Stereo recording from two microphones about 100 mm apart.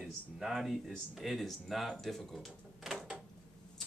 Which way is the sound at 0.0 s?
Centre (ahead or behind).